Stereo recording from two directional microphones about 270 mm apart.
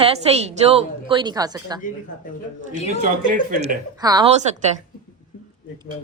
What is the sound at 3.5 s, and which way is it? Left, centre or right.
Speech, right.